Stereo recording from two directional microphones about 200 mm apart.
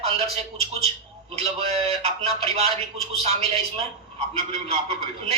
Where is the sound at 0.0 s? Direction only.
30° right (ahead or behind).